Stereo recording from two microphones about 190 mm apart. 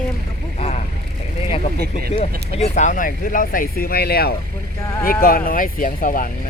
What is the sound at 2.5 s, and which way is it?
Speech, 35° left (ahead or behind).